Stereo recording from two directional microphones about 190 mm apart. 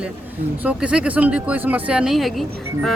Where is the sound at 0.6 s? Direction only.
5° right (ahead or behind).